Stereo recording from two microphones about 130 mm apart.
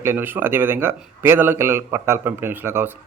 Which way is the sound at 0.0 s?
20° right (ahead or behind).